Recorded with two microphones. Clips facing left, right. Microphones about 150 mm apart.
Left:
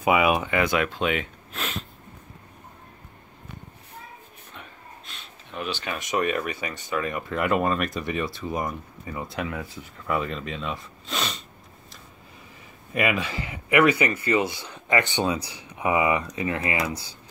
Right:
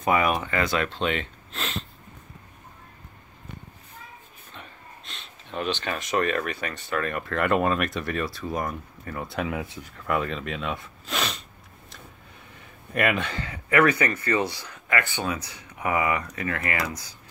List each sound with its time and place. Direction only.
0.0 s speech: 10° left (ahead or behind)
4.6 s gasp: 5° left (ahead or behind)
5.6 s speech: 10° left (ahead or behind)
8.1 s speech: 20° left (ahead or behind)
8.5 s speech: 5° left (ahead or behind)
12.9 s speech: centre (ahead or behind); by 15.6 s 30° left (ahead or behind)
15.8 s speech: 15° left (ahead or behind)
16.9 s speech: 30° left (ahead or behind)